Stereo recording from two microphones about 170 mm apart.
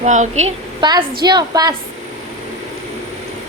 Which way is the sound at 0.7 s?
25° right (ahead or behind).